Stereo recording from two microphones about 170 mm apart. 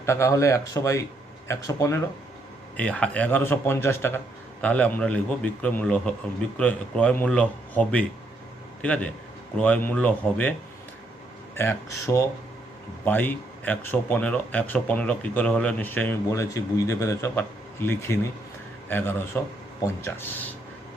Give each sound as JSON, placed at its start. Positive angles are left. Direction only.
{"t": 0.0, "sound": "a man's voice", "side_deg": 15}
{"t": 11.5, "sound": "speech", "side_deg": 15}